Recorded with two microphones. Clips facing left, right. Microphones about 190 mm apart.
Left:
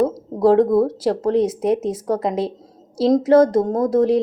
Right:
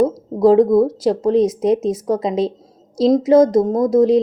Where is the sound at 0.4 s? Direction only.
15° right (ahead or behind).